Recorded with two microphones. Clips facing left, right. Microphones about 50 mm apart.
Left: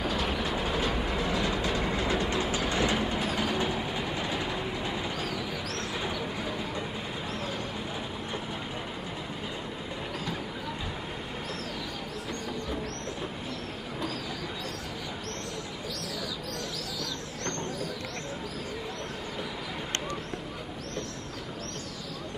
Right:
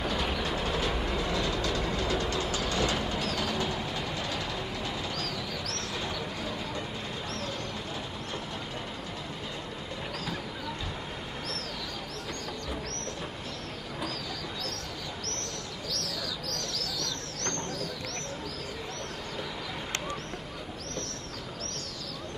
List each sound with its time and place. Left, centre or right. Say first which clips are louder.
0.0 s train: left 1 dB; centre
5.9 s a sound: left 2 dB; centre
16.5 s bird: even; centre